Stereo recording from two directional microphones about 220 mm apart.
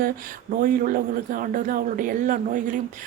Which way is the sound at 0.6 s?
40° right (ahead or behind).